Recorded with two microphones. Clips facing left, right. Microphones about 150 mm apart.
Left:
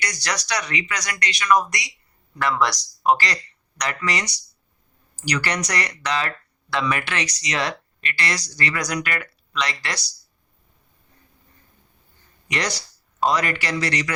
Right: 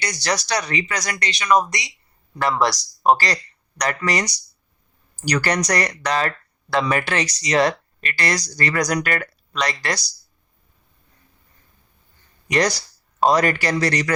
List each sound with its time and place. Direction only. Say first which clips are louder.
0.0 s speech: right 4 dB; 30° right (ahead or behind)
2.4 s speech: right 2 dB; 30° right (ahead or behind)
12.5 s speech: right 7 dB; 40° right (ahead or behind)